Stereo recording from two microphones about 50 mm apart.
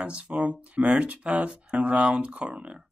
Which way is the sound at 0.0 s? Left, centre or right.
Right.